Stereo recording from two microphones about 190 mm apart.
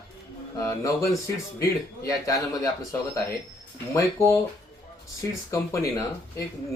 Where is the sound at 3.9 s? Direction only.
15° left (ahead or behind).